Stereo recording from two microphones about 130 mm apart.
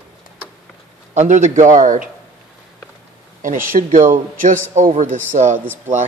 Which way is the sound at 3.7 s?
80° right.